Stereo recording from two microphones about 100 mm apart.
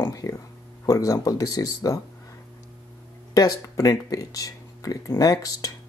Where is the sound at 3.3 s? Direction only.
35° left (ahead or behind).